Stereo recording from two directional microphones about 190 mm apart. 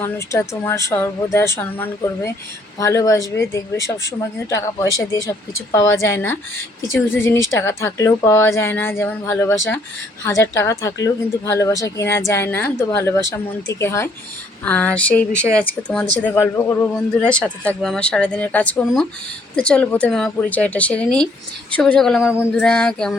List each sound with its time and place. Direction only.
0.0 s speech: 10° left (ahead or behind)